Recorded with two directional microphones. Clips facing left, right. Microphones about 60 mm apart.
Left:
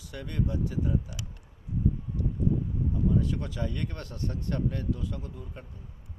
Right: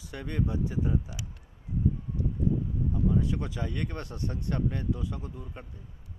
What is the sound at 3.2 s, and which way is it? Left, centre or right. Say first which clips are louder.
Speech: even; centre.